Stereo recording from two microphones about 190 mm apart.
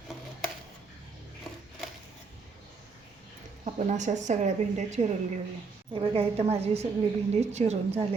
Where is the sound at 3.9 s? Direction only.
40° right (ahead or behind).